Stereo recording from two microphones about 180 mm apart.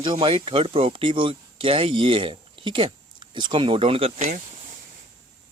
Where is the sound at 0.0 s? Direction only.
25° right (ahead or behind).